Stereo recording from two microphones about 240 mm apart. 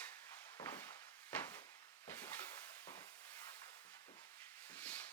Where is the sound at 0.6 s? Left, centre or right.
Centre.